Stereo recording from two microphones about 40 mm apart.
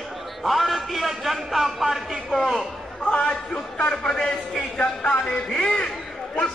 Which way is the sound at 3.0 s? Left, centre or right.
Left.